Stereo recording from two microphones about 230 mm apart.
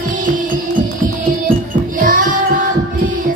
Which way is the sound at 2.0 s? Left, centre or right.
Right.